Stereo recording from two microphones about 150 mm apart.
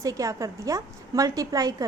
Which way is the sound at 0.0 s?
20° right (ahead or behind).